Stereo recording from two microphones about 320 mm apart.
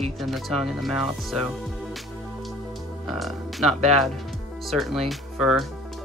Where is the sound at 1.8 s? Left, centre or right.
Centre.